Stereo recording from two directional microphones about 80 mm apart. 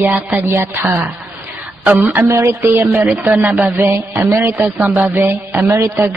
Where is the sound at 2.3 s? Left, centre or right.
Right.